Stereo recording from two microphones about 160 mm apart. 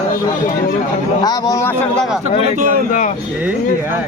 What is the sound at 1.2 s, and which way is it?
Speech, 25° left (ahead or behind).